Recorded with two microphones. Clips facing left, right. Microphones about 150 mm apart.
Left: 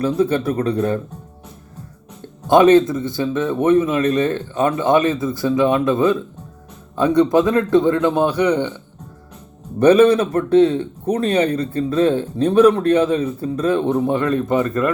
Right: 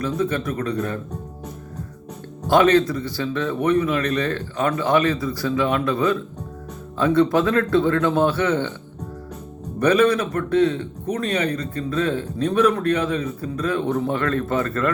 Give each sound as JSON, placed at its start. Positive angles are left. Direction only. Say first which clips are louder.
{"t": 0.0, "sound": "speech", "louder": "left 5 dB", "side_deg": 30}
{"t": 2.5, "sound": "a man's voice", "louder": "left 5 dB", "side_deg": 20}
{"t": 9.8, "sound": "a man's voice", "louder": "left 6 dB", "side_deg": 25}